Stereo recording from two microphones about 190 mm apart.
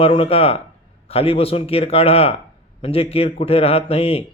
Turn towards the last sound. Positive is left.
turn(degrees=30)  # may be behind; listen again after turning